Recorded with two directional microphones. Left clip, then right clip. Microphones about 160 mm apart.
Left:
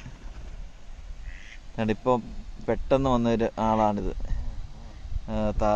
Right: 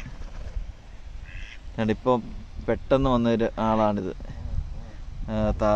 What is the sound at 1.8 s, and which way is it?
A man's voice, 5° left (ahead or behind).